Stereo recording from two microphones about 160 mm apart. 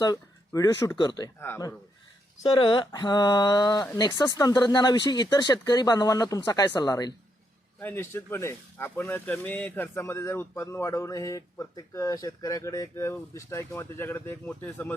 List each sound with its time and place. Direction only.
0.0 s speech: 25° left (ahead or behind)
2.5 s speech: 30° left (ahead or behind)
7.8 s speech: 15° left (ahead or behind)